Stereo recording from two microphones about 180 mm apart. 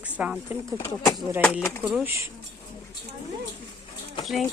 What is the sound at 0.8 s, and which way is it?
Speech, 20° left (ahead or behind).